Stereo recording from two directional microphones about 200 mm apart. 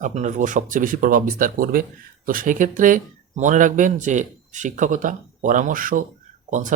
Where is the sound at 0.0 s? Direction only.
35° right (ahead or behind).